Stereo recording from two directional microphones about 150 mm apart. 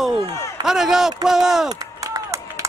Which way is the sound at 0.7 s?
5° right (ahead or behind).